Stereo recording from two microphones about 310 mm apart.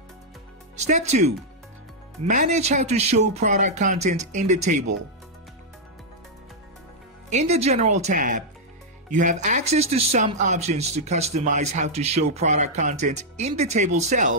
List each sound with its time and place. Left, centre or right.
0.7 s speech: right
7.3 s speech: right